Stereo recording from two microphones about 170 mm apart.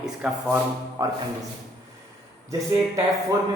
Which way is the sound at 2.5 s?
20° right (ahead or behind).